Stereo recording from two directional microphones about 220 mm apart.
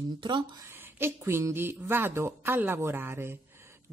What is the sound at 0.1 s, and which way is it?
Speech, 20° right (ahead or behind).